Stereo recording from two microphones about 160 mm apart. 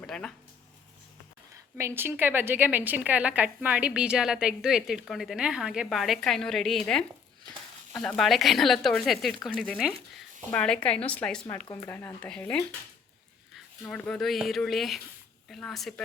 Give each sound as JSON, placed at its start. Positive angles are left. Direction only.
{"t": 0.0, "sound": "speech", "side_deg": 5}
{"t": 1.8, "sound": "a woman's voice", "side_deg": -15}